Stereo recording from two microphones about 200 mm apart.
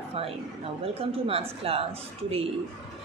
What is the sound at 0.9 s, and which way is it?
A woman's voice, 30° right (ahead or behind).